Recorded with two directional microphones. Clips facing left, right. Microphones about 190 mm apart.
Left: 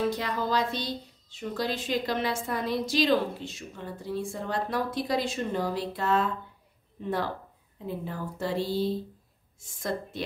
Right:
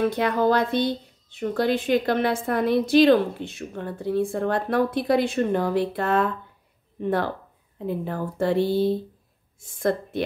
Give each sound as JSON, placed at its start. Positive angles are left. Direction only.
{"t": 0.0, "sound": "speech", "side_deg": -60}